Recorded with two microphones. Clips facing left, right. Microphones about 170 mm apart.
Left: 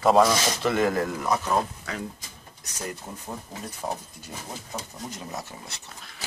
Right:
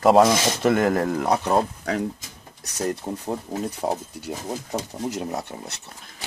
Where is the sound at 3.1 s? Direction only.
55° right (ahead or behind).